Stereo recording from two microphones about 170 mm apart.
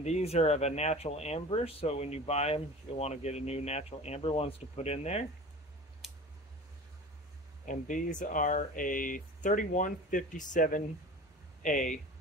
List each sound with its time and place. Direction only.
0.0 s speech: 40° left (ahead or behind)
6.0 s scissors: 5° right (ahead or behind)
7.6 s speech: 50° left (ahead or behind)